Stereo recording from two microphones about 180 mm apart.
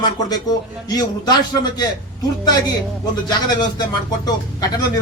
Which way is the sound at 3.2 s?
25° left (ahead or behind).